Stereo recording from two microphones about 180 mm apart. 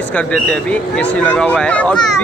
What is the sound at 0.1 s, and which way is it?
Speech, 5° left (ahead or behind).